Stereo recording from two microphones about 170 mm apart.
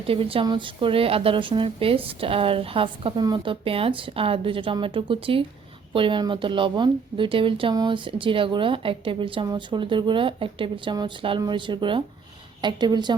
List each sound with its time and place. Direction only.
0.1 s a woman's voice: 30° right (ahead or behind)